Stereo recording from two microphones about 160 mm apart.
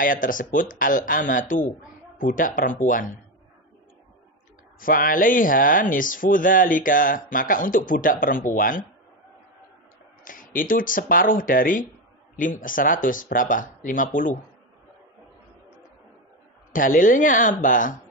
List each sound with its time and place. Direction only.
0.0 s speech: 55° left (ahead or behind)
4.7 s speech: 60° left (ahead or behind)
10.2 s speech: 60° left (ahead or behind)
16.7 s speech: 60° left (ahead or behind)